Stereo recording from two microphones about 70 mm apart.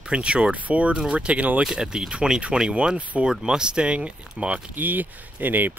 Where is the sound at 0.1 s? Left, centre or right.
Centre.